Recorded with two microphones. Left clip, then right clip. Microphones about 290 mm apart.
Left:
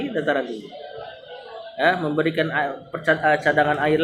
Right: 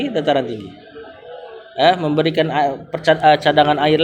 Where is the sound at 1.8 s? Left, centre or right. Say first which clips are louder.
Right 6 dB; right.